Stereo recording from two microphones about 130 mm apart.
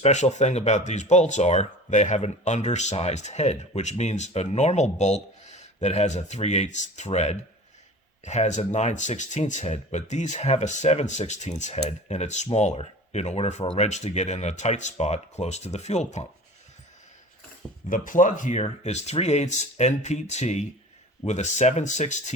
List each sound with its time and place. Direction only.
0.0 s speech: 60° left (ahead or behind)
17.8 s speech: 90° left; by 18.6 s 75° left (ahead or behind)
18.6 s speech: 60° left (ahead or behind)